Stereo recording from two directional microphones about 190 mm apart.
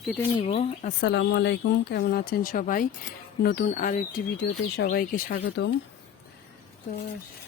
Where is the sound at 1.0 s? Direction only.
65° left (ahead or behind); by 4.2 s 45° left (ahead or behind).